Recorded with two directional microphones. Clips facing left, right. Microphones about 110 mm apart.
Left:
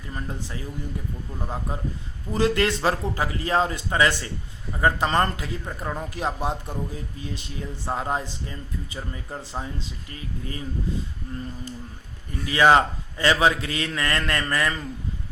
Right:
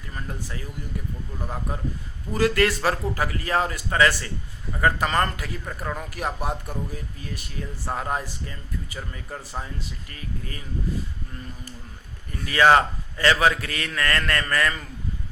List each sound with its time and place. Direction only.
2.3 s speech: 20° left (ahead or behind)
12.5 s speech: 15° left (ahead or behind)